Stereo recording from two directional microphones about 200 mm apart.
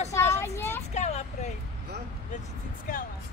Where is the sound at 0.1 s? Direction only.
15° left (ahead or behind).